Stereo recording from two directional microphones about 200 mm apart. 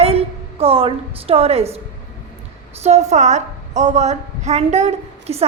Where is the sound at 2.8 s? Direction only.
35° right (ahead or behind).